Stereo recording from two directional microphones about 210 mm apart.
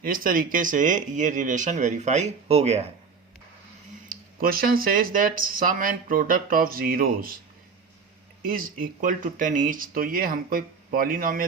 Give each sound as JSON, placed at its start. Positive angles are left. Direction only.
{"t": 0.0, "sound": "speech", "side_deg": -40}
{"t": 4.1, "sound": "speech", "side_deg": -45}
{"t": 8.4, "sound": "speech", "side_deg": -40}